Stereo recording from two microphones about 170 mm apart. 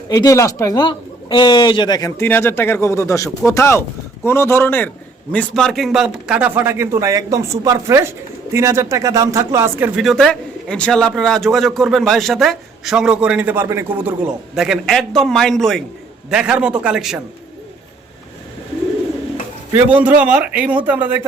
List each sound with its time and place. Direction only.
0.1 s a man's voice: 20° left (ahead or behind); by 10.0 s 10° right (ahead or behind)
10.0 s a man's voice: centre (ahead or behind)
19.7 s a man's voice: 10° right (ahead or behind)